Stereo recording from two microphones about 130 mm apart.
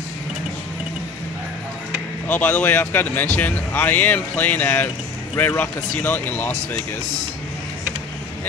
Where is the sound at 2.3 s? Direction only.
15° left (ahead or behind).